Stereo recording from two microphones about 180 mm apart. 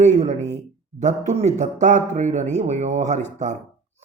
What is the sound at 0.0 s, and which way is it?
Speech, 40° right (ahead or behind).